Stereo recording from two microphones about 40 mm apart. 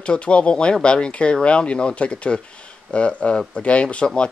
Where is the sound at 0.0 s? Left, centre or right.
Left.